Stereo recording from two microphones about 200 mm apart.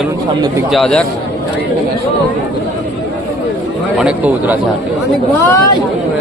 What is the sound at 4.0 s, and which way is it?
Speech, 5° right (ahead or behind).